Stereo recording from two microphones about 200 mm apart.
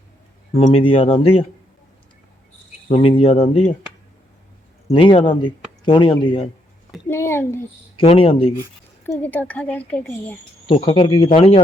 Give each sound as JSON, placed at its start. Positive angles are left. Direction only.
{"t": 0.5, "sound": "speech", "side_deg": 30}
{"t": 2.9, "sound": "speech", "side_deg": 25}
{"t": 4.9, "sound": "speech", "side_deg": 25}
{"t": 7.1, "sound": "a woman's voice", "side_deg": 10}
{"t": 7.9, "sound": "speech", "side_deg": 25}
{"t": 9.0, "sound": "a woman's voice", "side_deg": 10}
{"t": 10.7, "sound": "speech", "side_deg": 25}